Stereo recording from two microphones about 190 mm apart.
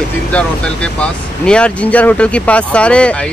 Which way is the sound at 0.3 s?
5° left (ahead or behind).